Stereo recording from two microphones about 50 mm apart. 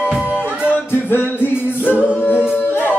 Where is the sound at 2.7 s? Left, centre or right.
Left.